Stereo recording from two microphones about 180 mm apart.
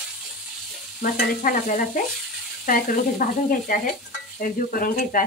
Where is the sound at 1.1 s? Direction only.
50° left (ahead or behind).